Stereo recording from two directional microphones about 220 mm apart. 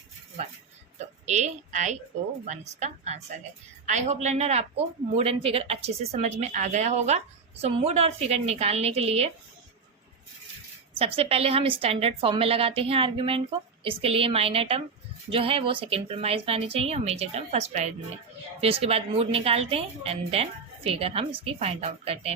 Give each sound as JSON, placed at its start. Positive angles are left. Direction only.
{"t": 1.2, "sound": "a woman's voice", "side_deg": -30}
{"t": 10.9, "sound": "speech", "side_deg": -25}